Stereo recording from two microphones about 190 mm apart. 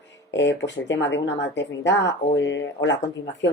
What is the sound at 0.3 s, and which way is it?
Speech, 65° left (ahead or behind).